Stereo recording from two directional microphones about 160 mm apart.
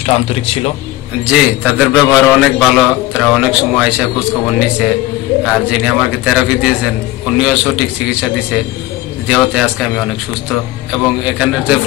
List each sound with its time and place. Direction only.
0.0 s a man's voice: 40° left (ahead or behind)
1.2 s a man's voice: 5° right (ahead or behind)